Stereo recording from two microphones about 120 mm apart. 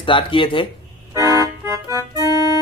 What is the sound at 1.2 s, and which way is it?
Music, 25° right (ahead or behind).